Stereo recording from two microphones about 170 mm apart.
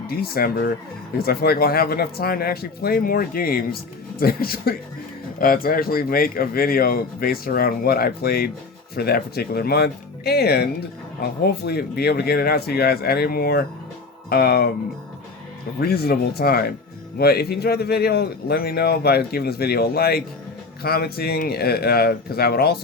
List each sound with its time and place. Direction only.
0.1 s a man's voice: 60° left (ahead or behind)
15.8 s a man's voice: 65° left (ahead or behind)